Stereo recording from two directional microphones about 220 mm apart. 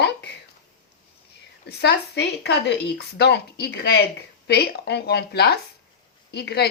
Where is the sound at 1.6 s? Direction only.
50° left (ahead or behind).